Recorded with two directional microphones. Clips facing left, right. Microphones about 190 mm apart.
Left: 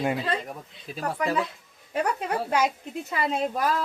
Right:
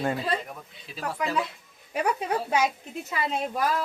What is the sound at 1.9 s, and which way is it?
Speech, 5° right (ahead or behind).